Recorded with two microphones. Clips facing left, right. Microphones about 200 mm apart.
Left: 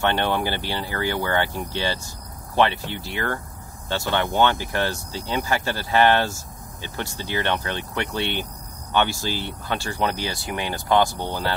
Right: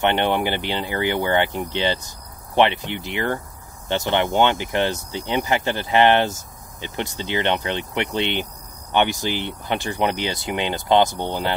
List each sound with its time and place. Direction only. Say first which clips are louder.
0.0 s speech: right 3 dB; 20° right (ahead or behind)